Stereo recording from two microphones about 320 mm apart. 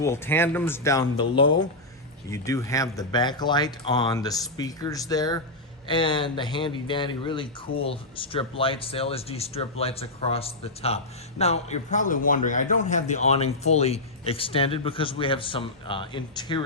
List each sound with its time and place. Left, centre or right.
0.0 s speech: centre